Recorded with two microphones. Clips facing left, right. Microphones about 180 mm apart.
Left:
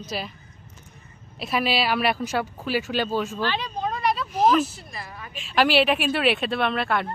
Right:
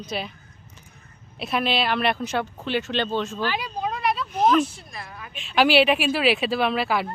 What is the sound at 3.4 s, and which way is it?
Speech, 10° right (ahead or behind).